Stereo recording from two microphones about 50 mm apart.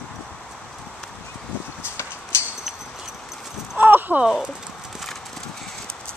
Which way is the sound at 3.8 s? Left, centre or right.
Right.